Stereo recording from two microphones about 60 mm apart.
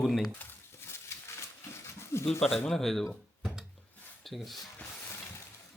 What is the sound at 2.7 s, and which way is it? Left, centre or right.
Speech, centre.